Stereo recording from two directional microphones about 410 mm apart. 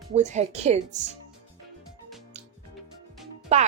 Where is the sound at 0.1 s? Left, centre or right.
Centre.